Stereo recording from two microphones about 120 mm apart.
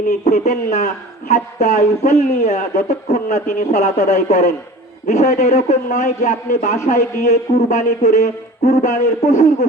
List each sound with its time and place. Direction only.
0.3 s speech: 80° left
1.3 s speech: 75° left (ahead or behind)